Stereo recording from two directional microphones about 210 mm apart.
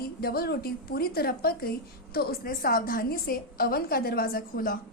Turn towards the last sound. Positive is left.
turn(degrees=45)  # may be behind; listen again after turning